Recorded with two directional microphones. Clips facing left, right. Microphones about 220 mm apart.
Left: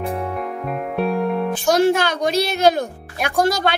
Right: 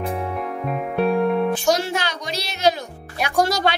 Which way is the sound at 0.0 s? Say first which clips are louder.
Left 1 dB; centre (ahead or behind).